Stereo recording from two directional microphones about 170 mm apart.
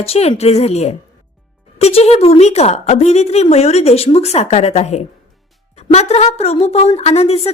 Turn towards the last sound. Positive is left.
turn(degrees=40)  # may be behind; listen again after turning